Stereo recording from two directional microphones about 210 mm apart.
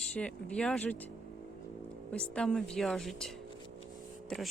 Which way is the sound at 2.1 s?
5° left (ahead or behind).